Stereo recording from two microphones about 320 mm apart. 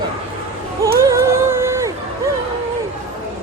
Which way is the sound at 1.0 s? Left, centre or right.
Centre.